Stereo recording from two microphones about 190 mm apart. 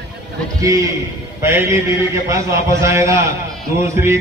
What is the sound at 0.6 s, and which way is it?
Music, 15° right (ahead or behind).